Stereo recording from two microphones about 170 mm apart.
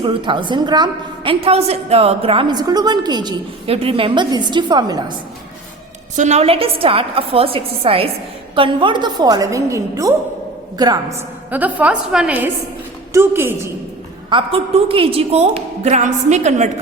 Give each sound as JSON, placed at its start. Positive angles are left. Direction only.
{"t": 0.0, "sound": "a woman's voice", "side_deg": -30}
{"t": 6.1, "sound": "a woman's voice", "side_deg": -40}
{"t": 11.5, "sound": "a woman's voice", "side_deg": -10}
{"t": 14.3, "sound": "a woman's voice", "side_deg": -30}